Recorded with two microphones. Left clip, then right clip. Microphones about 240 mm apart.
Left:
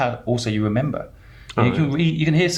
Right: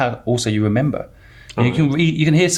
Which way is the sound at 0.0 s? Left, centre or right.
Right.